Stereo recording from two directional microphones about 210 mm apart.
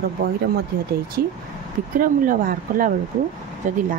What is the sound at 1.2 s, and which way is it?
Speech, 45° right (ahead or behind).